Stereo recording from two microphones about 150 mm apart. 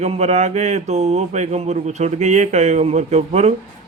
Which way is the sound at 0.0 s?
45° right (ahead or behind).